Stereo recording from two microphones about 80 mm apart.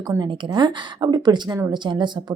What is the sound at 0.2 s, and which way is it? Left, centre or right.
Speech, right.